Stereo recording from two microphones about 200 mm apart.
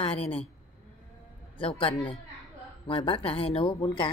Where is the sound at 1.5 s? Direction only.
25° left (ahead or behind).